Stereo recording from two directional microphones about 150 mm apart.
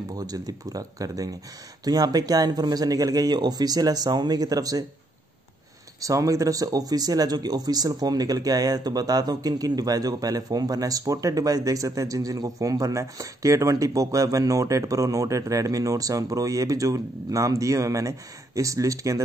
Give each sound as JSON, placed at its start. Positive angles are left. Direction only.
{"t": 0.1, "sound": "speech", "side_deg": -25}
{"t": 5.9, "sound": "speech", "side_deg": -20}